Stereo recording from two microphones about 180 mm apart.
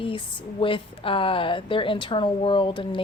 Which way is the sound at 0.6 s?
30° left (ahead or behind).